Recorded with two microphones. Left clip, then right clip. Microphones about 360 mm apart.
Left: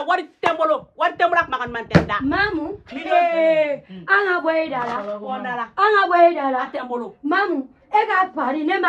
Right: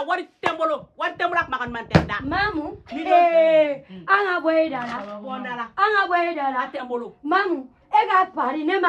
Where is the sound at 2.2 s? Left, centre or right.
Right; by 4.7 s centre.